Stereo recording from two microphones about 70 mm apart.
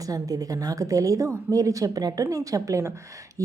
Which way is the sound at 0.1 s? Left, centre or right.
Right.